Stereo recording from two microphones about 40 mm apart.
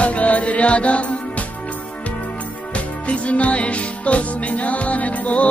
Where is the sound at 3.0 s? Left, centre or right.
Left.